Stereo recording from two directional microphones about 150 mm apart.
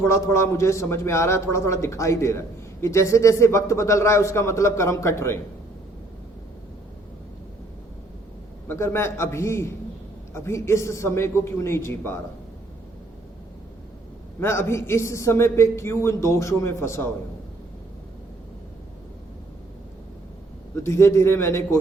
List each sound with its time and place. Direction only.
0.0 s a man's voice: 20° left (ahead or behind)
8.6 s a man's voice: 15° left (ahead or behind)
14.3 s a man's voice: 15° left (ahead or behind)
20.8 s a man's voice: 20° left (ahead or behind)